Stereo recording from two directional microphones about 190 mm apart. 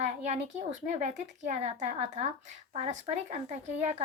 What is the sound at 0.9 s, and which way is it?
Speech, 35° right (ahead or behind).